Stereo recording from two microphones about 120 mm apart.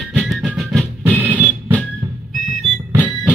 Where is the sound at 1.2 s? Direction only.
15° right (ahead or behind).